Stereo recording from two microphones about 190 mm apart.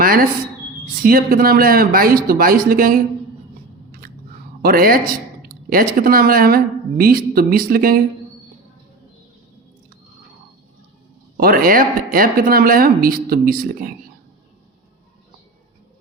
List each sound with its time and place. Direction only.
0.0 s speech: 50° right (ahead or behind)
4.6 s speech: 50° right (ahead or behind)
11.3 s speech: 50° right (ahead or behind)